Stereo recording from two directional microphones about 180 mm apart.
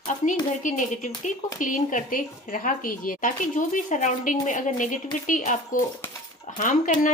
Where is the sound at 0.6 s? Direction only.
45° left (ahead or behind).